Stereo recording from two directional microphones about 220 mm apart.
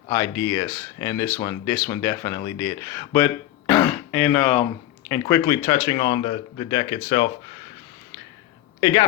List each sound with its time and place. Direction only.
0.1 s speech: 10° left (ahead or behind)
8.8 s speech: 20° left (ahead or behind)